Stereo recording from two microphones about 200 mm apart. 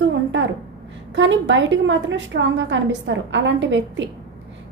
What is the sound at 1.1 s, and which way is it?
A woman's voice, 65° right (ahead or behind).